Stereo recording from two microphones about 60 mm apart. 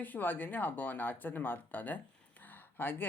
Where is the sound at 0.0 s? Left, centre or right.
Left.